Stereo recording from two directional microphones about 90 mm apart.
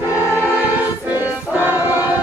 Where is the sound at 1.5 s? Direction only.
20° right (ahead or behind).